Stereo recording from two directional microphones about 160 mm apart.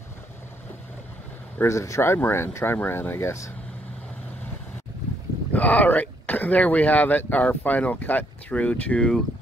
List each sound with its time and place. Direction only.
1.6 s speech: 20° left (ahead or behind)
5.5 s speech: 10° left (ahead or behind)